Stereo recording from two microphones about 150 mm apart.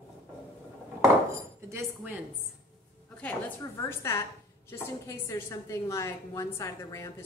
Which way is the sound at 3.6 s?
20° left (ahead or behind).